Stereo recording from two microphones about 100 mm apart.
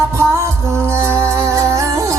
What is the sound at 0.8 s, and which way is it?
Music, 25° right (ahead or behind).